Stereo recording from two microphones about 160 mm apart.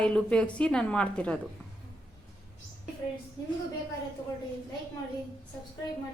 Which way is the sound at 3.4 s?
25° left (ahead or behind).